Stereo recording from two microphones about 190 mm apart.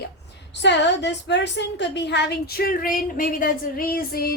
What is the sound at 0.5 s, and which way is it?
A woman's voice, 65° left (ahead or behind).